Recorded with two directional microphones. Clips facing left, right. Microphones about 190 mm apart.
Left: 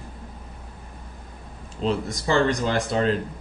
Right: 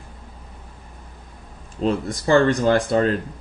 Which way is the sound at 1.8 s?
50° right (ahead or behind).